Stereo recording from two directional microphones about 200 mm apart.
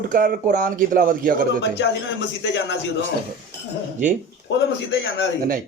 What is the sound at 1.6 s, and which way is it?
Speech, 60° left (ahead or behind).